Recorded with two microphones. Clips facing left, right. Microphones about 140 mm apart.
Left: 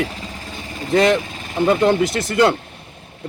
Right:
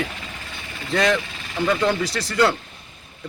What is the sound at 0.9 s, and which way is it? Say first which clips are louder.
Speech: left 5 dB; 20° left (ahead or behind).